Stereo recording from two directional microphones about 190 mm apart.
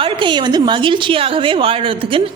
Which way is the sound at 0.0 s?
25° right (ahead or behind).